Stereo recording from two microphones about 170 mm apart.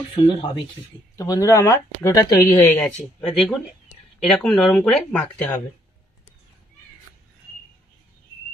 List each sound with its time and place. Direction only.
0.2 s speech: 30° left (ahead or behind)
1.1 s speech: 20° left (ahead or behind)